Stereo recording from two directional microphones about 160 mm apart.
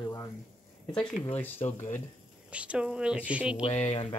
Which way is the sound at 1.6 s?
45° left (ahead or behind).